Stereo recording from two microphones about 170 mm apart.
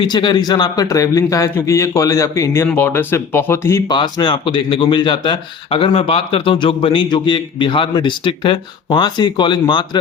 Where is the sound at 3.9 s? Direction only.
25° left (ahead or behind).